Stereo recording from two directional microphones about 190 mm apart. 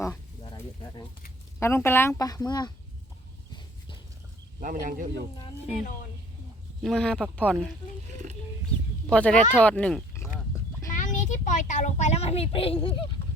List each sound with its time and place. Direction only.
1.5 s speech: 15° left (ahead or behind)
3.5 s a sound: 25° left (ahead or behind)
4.6 s speech: 45° right (ahead or behind)
5.8 s a woman's voice: 45° left (ahead or behind)
6.8 s speech: 5° left (ahead or behind)
9.0 s speech: 5° left (ahead or behind)
10.8 s a child's voice: 40° left (ahead or behind)